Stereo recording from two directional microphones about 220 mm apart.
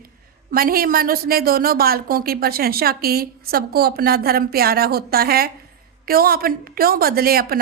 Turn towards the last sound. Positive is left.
turn(degrees=-40)  # may be behind; listen again after turning